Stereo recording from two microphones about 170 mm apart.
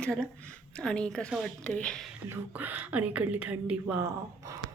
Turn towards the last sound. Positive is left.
turn(degrees=-20)  # may be behind; listen again after turning